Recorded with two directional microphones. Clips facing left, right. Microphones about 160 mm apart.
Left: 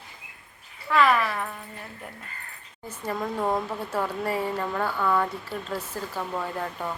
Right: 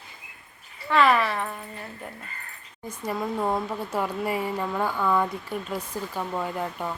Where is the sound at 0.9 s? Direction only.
Centre (ahead or behind).